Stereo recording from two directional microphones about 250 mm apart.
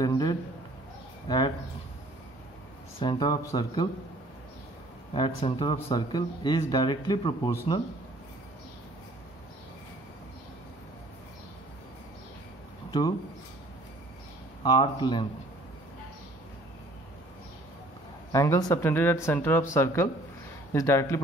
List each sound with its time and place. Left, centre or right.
0.0 s a sound: centre
1.3 s speech: centre
3.0 s speech: centre
5.1 s speech: centre
14.6 s speech: centre
18.3 s speech: centre